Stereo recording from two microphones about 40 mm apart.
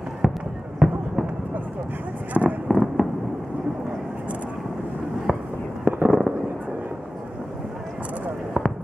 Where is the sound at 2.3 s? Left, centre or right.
Right.